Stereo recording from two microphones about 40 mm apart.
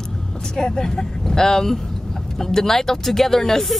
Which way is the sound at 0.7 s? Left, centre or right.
Centre.